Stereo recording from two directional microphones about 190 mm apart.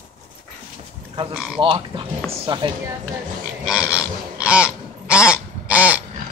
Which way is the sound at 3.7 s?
5° right (ahead or behind).